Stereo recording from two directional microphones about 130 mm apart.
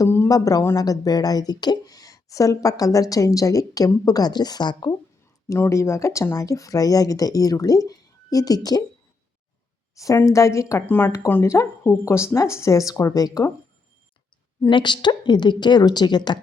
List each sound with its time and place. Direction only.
0.0 s a woman's voice: 25° left (ahead or behind)
5.5 s a woman's voice: 25° left (ahead or behind)
9.9 s a woman's voice: 25° left (ahead or behind)
14.7 s a woman's voice: 35° left (ahead or behind)